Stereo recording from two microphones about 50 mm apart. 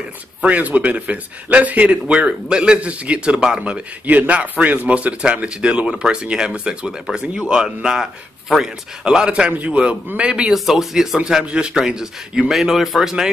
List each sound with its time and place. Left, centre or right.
0.4 s a man's voice: right
10.5 s speech: centre
11.4 s a man's voice: centre